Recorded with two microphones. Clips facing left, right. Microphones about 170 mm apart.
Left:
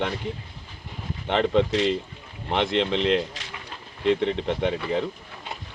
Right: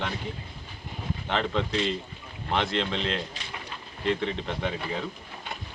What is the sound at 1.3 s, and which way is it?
Speech, 20° left (ahead or behind).